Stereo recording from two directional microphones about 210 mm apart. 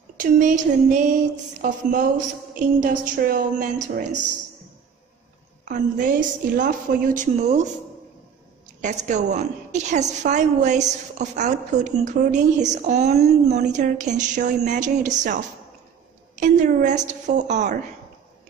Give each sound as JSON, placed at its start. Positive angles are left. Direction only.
{"t": 0.2, "sound": "a woman's voice", "side_deg": -40}
{"t": 5.7, "sound": "a woman's voice", "side_deg": -40}
{"t": 8.8, "sound": "a woman's voice", "side_deg": -35}
{"t": 16.3, "sound": "a woman's voice", "side_deg": -35}